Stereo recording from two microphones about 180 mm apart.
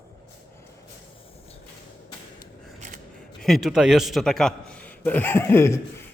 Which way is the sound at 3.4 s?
Centre (ahead or behind).